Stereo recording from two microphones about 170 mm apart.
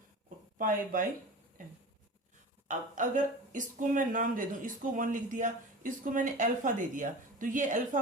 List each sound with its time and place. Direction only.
0.6 s speech: 50° right (ahead or behind)
2.6 s speech: 50° right (ahead or behind)